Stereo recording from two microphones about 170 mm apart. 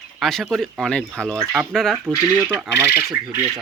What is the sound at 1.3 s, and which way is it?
Speech, 10° right (ahead or behind).